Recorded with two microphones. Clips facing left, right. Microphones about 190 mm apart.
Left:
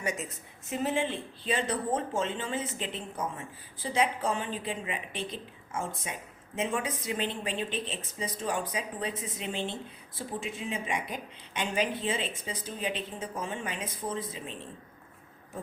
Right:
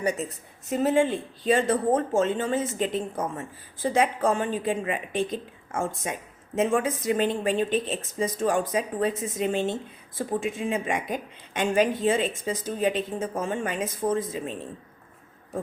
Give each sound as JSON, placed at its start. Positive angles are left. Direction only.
{"t": 0.0, "sound": "a woman's voice", "side_deg": -35}